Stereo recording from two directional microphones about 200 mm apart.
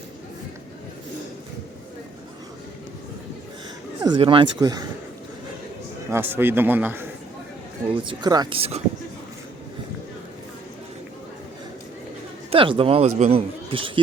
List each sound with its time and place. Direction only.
4.0 s speech: 25° right (ahead or behind)
6.1 s a man's voice: 10° right (ahead or behind)
8.0 s speech: 20° right (ahead or behind)
12.5 s speech: 25° right (ahead or behind)